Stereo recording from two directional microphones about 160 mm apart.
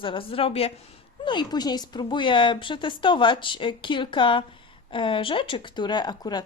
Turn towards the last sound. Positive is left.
turn(degrees=25)  # may be behind; listen again after turning